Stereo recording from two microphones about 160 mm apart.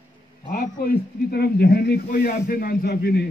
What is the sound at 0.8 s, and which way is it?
Speech, 80° left.